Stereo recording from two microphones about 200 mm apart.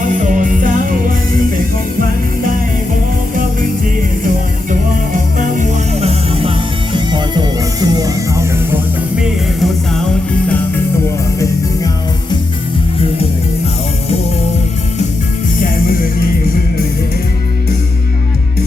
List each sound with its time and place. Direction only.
0.0 s music: 40° right (ahead or behind)
5.5 s music: 35° right (ahead or behind)
6.9 s music: 20° right (ahead or behind)